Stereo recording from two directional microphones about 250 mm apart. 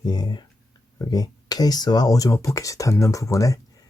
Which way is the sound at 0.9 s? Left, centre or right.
Centre.